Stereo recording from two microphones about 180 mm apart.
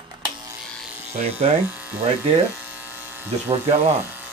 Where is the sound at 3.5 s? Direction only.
35° right (ahead or behind).